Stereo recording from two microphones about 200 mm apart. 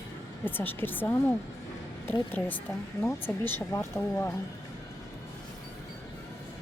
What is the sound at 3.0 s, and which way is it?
A woman's voice, 10° left (ahead or behind).